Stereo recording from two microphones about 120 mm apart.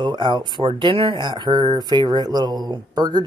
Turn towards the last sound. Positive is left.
turn(degrees=-35)  # may be behind; listen again after turning